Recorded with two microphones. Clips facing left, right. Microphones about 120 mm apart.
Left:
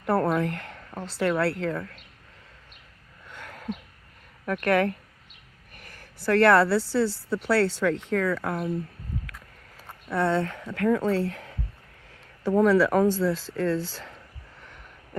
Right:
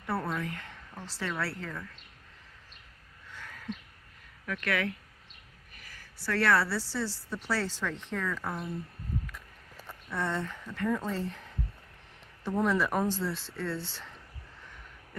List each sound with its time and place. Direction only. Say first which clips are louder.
0.0 s speech: left 10 dB; 60° left (ahead or behind)
3.2 s a sound: left 5 dB; 60° left (ahead or behind)
4.4 s speech: left 9 dB; 45° left (ahead or behind)
5.7 s a sound: left 5 dB; 55° left (ahead or behind)
7.3 s speech: left 10 dB; 75° left (ahead or behind); by 8.7 s 90° left
10.1 s speech: left 9 dB; 70° left (ahead or behind); by 14.1 s 90° left